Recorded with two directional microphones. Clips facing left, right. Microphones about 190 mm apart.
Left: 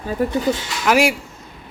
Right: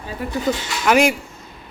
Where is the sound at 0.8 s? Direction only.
5° left (ahead or behind).